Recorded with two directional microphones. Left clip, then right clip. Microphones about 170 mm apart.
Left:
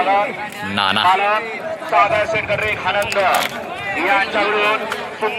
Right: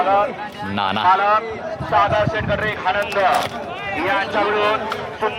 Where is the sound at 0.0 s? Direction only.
10° left (ahead or behind).